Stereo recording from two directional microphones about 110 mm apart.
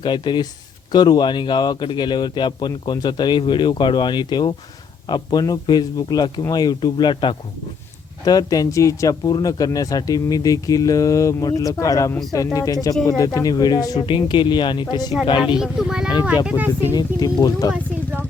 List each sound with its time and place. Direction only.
0.0 s speech: 45° left (ahead or behind)
8.2 s speech: 35° left (ahead or behind)
14.1 s speech: 50° left (ahead or behind)
15.5 s speech: 5° right (ahead or behind)
16.5 s speech: 15° right (ahead or behind)
16.9 s speech: 35° left (ahead or behind)
17.7 s speech: 20° right (ahead or behind)